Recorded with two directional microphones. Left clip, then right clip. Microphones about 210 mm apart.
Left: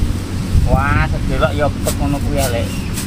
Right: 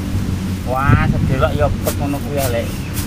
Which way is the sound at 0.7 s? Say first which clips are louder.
Even; 5° right (ahead or behind).